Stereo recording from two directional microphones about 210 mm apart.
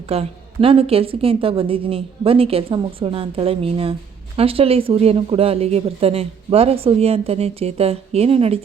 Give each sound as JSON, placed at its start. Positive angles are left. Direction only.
{"t": 0.1, "sound": "speech", "side_deg": -25}